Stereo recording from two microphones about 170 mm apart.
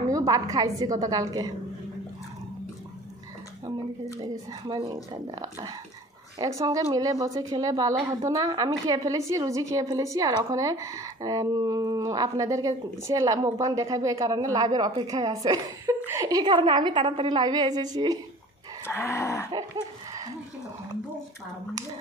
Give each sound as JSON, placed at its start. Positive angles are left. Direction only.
{"t": 0.0, "sound": "a woman's voice", "side_deg": -20}
{"t": 4.2, "sound": "speech", "side_deg": -25}
{"t": 18.9, "sound": "a sound", "side_deg": 15}